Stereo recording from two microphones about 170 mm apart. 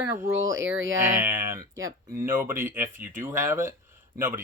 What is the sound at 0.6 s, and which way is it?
Speech, 90° right.